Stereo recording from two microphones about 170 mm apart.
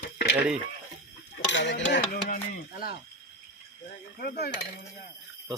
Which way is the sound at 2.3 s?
60° left (ahead or behind).